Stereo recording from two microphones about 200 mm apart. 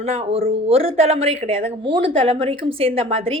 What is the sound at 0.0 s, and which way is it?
Speech, 30° right (ahead or behind).